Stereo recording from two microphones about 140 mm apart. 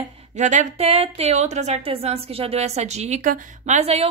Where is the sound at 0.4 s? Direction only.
60° right (ahead or behind).